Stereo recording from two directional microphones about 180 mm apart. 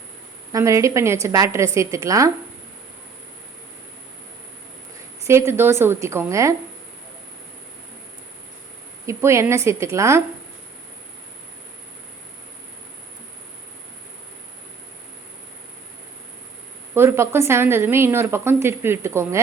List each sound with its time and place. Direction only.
0.5 s a woman's voice: 15° right (ahead or behind)
5.2 s a woman's voice: 15° right (ahead or behind)
9.0 s a woman's voice: 15° right (ahead or behind)
16.9 s a woman's voice: 15° right (ahead or behind)